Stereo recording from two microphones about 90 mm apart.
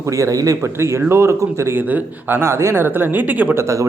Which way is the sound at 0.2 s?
40° right (ahead or behind).